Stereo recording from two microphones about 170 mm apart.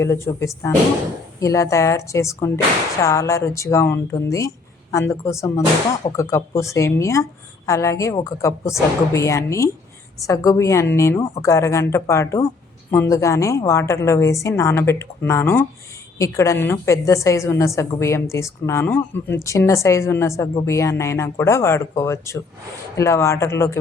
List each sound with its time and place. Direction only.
0.0 s a woman's voice: 15° left (ahead or behind)